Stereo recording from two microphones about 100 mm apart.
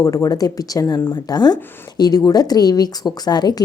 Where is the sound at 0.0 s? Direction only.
35° left (ahead or behind).